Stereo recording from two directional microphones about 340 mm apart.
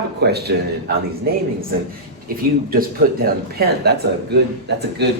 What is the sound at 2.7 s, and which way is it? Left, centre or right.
Speech, right.